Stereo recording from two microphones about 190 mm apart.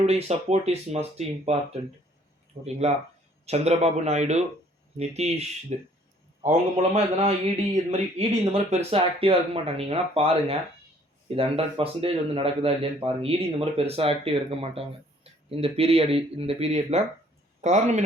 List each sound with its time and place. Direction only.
0.0 s a man's voice: 35° right (ahead or behind)